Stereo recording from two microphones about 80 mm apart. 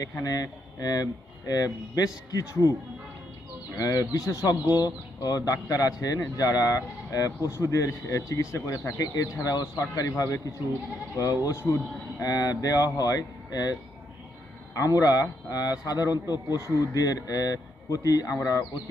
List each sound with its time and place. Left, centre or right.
0.0 s speech: left
3.8 s speech: left
4.7 s speech: left
11.5 s speech: left
12.2 s speech: left
14.8 s speech: left
16.6 s speech: left